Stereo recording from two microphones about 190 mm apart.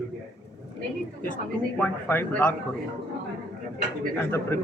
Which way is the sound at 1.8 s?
10° left (ahead or behind).